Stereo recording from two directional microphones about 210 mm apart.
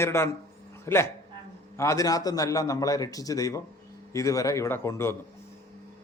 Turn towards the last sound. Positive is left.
turn(degrees=10)  # may be behind; listen again after turning